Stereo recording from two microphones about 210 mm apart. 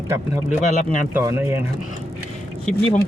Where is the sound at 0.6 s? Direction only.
35° left (ahead or behind).